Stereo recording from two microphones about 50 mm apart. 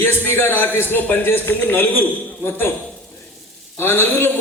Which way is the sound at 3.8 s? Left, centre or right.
Left.